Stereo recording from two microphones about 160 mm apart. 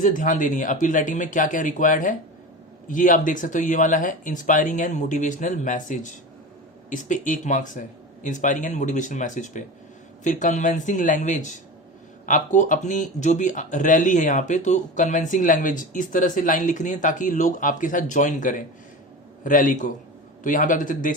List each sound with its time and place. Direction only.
0.0 s a man's voice: 55° left (ahead or behind)